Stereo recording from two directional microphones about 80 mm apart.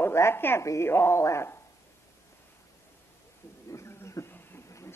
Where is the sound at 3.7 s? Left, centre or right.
Left.